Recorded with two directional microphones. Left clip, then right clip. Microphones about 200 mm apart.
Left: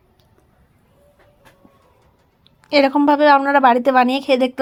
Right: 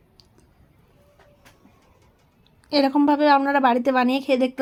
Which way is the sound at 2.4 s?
20° left (ahead or behind).